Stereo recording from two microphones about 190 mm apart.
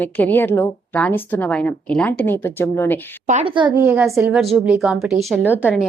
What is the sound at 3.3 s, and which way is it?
Speech, 40° right (ahead or behind).